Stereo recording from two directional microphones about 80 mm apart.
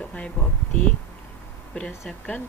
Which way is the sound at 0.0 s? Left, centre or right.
Centre.